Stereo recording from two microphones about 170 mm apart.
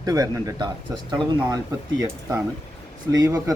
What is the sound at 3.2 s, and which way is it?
Speech, 20° right (ahead or behind).